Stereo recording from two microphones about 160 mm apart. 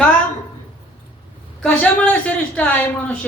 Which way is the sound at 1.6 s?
5° left (ahead or behind).